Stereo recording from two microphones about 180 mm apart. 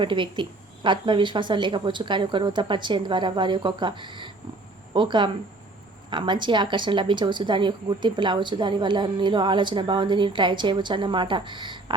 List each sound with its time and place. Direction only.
0.0 s speech: 25° right (ahead or behind)